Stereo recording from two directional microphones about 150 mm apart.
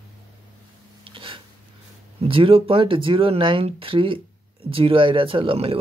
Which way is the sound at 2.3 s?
35° right (ahead or behind).